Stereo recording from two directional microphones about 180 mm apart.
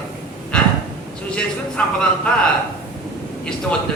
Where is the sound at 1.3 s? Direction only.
5° left (ahead or behind).